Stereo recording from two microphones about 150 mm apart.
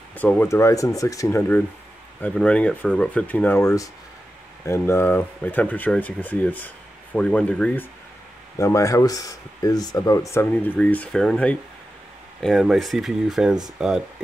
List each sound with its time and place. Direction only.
0.1 s speech: 10° left (ahead or behind)
2.2 s speech: 10° left (ahead or behind)
8.5 s speech: 20° left (ahead or behind); by 14.0 s 5° right (ahead or behind)